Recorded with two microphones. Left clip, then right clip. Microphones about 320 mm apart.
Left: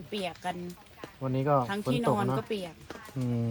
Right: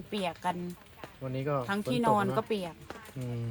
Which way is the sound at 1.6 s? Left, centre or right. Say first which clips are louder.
Even; centre.